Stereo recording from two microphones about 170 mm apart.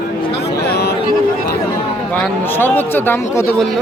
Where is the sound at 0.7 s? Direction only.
70° left (ahead or behind).